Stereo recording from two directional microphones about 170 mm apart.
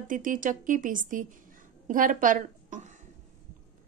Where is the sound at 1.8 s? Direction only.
50° right (ahead or behind).